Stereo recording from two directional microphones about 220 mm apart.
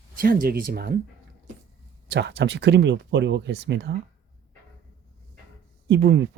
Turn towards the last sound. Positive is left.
turn(degrees=-50)  # may be behind; listen again after turning